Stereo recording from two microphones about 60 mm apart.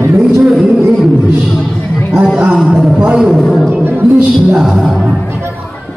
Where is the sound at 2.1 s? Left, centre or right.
Centre.